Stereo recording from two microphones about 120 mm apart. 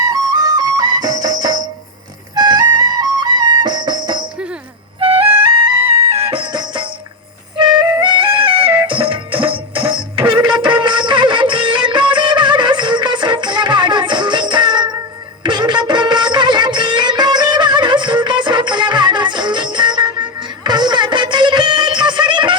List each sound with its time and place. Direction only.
0.0 s music: 30° right (ahead or behind)
4.9 s music: 50° right (ahead or behind)
7.9 s music: 40° right (ahead or behind)